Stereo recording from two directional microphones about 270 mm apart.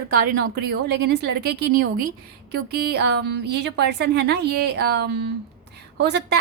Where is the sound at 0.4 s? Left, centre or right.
Right.